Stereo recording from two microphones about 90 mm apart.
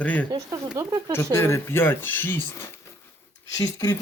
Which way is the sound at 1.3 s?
30° left (ahead or behind).